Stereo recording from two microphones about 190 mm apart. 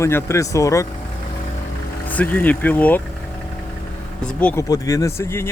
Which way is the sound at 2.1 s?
10° left (ahead or behind).